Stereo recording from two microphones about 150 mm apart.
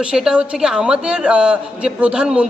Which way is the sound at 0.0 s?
5° right (ahead or behind).